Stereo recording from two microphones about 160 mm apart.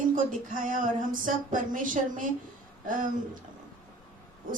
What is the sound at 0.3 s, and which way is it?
Speech, 55° right (ahead or behind).